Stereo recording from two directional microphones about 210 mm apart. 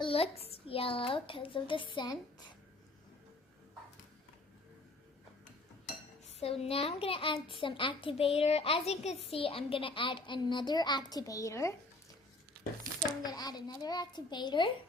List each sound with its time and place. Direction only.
0.0 s a child's voice: 25° left (ahead or behind)
6.2 s a child's voice: 30° left (ahead or behind)
13.2 s a child's voice: 20° left (ahead or behind)